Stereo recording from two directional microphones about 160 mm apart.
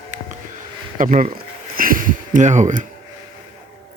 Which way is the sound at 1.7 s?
60° right (ahead or behind).